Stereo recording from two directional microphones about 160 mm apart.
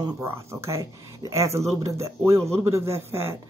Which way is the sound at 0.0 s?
15° right (ahead or behind).